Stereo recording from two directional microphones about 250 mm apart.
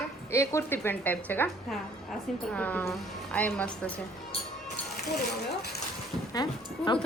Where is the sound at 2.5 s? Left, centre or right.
Centre.